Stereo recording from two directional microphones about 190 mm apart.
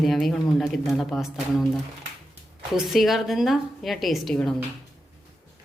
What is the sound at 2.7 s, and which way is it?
A woman's voice, centre (ahead or behind).